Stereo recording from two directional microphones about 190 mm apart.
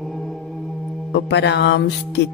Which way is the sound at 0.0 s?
Centre (ahead or behind).